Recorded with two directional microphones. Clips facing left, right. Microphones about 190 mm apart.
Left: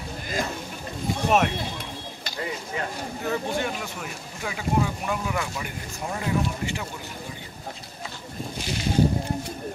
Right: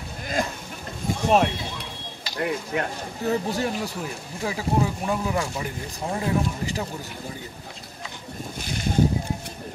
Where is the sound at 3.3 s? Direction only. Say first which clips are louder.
Right 3 dB; 35° right (ahead or behind).